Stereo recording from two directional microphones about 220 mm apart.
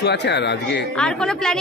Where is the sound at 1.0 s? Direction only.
5° left (ahead or behind).